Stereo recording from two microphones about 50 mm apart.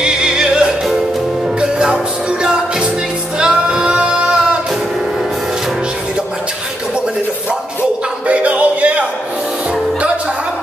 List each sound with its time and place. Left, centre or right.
0.0 s music: centre
3.3 s music: centre
8.3 s music: right